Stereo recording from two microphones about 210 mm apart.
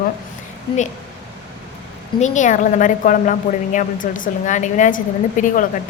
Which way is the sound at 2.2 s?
35° left (ahead or behind).